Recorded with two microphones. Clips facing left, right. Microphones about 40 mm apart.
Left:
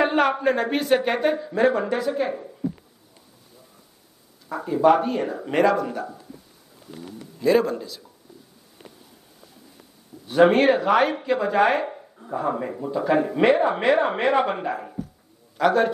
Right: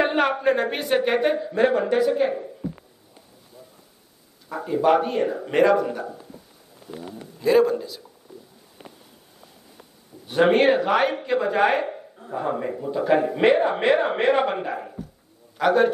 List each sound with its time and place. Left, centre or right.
0.0 s speech: centre
4.5 s speech: centre
6.9 s speech: centre
7.3 s speech: centre
8.3 s a sound: centre
10.3 s a man's voice: centre